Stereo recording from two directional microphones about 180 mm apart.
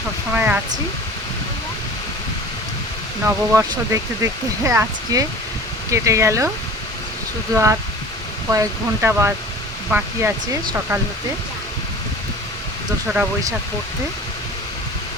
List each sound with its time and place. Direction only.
0.3 s hair dryer: 10° right (ahead or behind)
3.2 s speech: 15° right (ahead or behind)
7.5 s speech: 15° right (ahead or behind)